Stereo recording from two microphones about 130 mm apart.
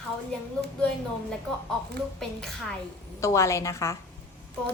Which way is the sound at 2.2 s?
5° left (ahead or behind).